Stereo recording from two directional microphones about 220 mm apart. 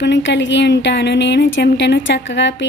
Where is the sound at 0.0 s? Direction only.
55° left (ahead or behind).